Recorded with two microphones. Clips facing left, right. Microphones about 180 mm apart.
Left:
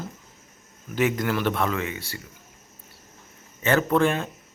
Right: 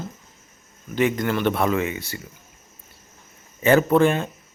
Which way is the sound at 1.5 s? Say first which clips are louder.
Right 4 dB; 15° right (ahead or behind).